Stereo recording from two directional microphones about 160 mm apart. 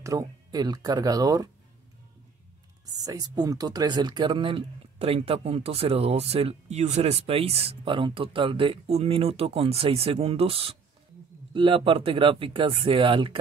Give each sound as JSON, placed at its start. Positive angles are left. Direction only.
{"t": 0.0, "sound": "speech", "side_deg": -20}
{"t": 2.8, "sound": "speech", "side_deg": -25}